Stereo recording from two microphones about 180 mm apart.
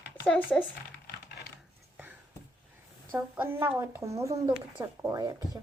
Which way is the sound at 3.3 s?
10° right (ahead or behind).